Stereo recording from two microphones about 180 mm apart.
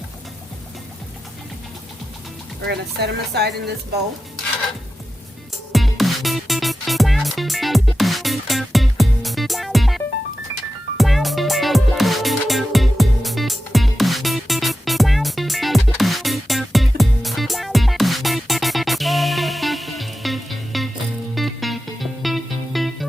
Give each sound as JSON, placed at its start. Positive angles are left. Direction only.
{"t": 2.6, "sound": "speech", "side_deg": -65}
{"t": 5.7, "sound": "music", "side_deg": 0}